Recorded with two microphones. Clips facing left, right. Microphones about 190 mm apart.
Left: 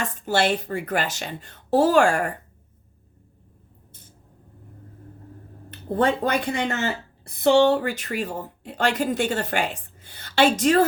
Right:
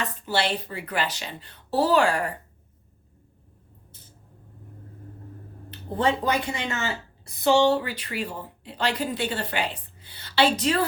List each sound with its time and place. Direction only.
0.0 s a woman's voice: 50° left (ahead or behind)
6.0 s a woman's voice: 55° left (ahead or behind)